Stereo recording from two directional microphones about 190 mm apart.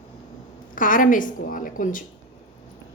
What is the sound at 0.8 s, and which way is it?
A woman's voice, 45° left (ahead or behind).